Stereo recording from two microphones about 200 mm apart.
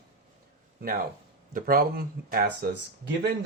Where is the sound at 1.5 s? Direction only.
45° right (ahead or behind).